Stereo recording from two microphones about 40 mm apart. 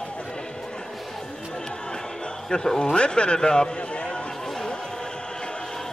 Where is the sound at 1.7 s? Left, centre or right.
Left.